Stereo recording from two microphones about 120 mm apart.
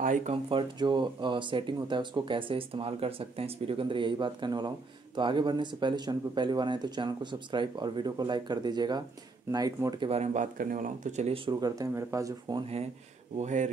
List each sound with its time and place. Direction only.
0.0 s speech: 85° right
0.5 s speech: 45° right (ahead or behind)
9.9 s speech: 55° right (ahead or behind)
11.6 s speech: 30° right (ahead or behind)
13.4 s speech: 90° right